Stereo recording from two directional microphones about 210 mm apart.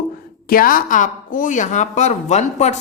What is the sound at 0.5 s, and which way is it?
A woman's voice, 40° left (ahead or behind).